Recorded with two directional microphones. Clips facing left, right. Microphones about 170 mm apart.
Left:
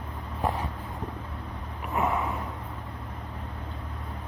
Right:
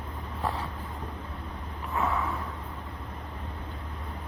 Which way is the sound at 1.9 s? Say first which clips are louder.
Left 2 dB; 20° left (ahead or behind).